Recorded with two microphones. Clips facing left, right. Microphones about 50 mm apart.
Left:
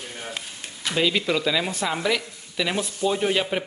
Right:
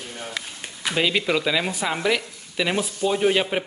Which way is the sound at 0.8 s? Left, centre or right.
Centre.